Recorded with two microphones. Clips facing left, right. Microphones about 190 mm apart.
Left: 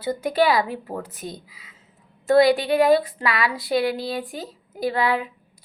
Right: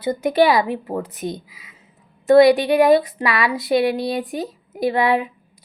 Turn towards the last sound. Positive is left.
turn(degrees=-20)  # may be behind; listen again after turning